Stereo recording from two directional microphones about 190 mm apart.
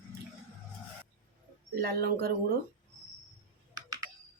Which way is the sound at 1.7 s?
50° right (ahead or behind).